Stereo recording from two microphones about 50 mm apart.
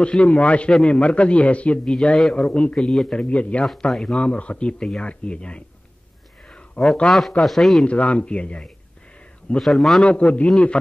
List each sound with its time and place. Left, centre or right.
0.0 s speech: left
2.1 s a man's voice: centre
2.5 s speech: left
2.8 s a man's voice: centre
3.2 s speech: left
3.9 s speech: centre
6.8 s speech: left
7.1 s a man's voice: centre
7.8 s speech: left
9.6 s a man's voice: centre
10.0 s speech: left